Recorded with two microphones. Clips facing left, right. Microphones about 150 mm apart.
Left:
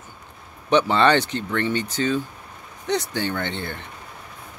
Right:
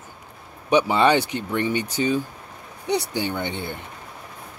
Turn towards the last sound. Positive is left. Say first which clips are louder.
# even
turn(degrees=-10)  # may be behind; listen again after turning